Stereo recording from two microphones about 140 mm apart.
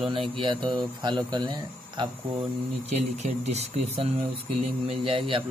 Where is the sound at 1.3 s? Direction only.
30° right (ahead or behind).